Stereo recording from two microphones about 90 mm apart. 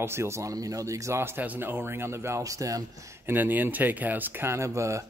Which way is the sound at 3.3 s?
20° right (ahead or behind).